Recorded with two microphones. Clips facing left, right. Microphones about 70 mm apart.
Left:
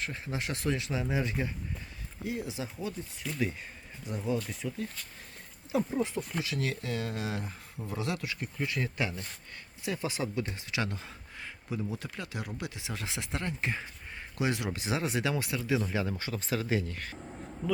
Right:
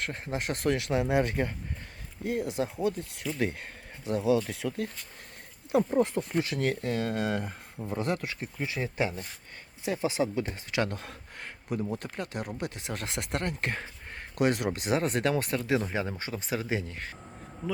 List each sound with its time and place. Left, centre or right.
0.0 s speech: right
5.7 s speech: right
10.8 s speech: right
15.8 s speech: right